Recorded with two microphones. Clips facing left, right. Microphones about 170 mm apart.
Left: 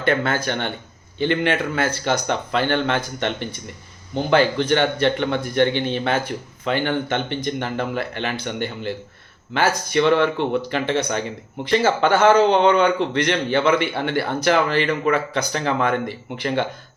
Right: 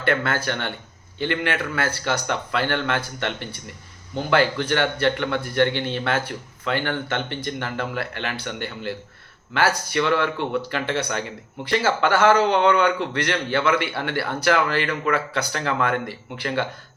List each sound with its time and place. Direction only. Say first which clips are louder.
0.0 s speech: left 2 dB; 20° left (ahead or behind)